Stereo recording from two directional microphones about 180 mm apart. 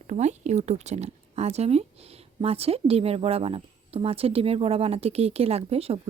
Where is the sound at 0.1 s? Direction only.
40° right (ahead or behind).